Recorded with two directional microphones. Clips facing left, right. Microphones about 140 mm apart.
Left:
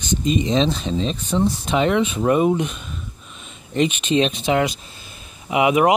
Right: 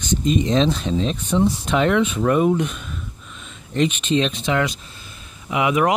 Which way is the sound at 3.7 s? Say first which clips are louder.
Left 1 dB; 10° left (ahead or behind).